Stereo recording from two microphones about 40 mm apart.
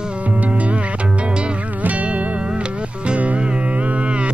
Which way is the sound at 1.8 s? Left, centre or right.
Right.